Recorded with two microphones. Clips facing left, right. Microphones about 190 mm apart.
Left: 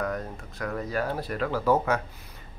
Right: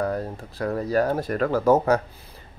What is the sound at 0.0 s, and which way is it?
Speech, 30° right (ahead or behind).